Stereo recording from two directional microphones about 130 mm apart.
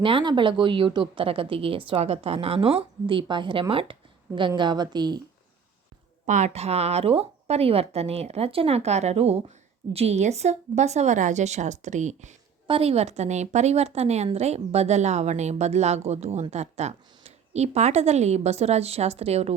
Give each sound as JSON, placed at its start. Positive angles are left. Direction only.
{"t": 0.0, "sound": "a woman's voice", "side_deg": -40}
{"t": 6.2, "sound": "speech", "side_deg": -65}
{"t": 12.6, "sound": "speech", "side_deg": -45}